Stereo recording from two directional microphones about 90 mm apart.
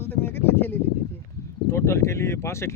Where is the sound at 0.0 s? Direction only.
25° left (ahead or behind).